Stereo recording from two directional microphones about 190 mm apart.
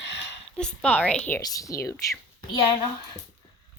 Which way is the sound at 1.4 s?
20° left (ahead or behind).